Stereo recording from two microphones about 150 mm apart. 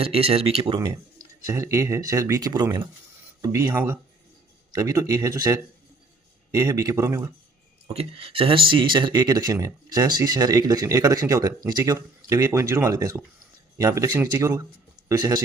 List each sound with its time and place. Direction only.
0.0 s speech: 40° right (ahead or behind)
1.5 s speech: 20° right (ahead or behind)
7.9 s speech: 40° right (ahead or behind)